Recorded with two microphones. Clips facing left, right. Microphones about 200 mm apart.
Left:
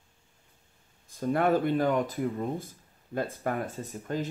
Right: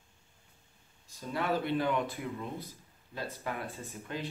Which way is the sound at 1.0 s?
50° left (ahead or behind).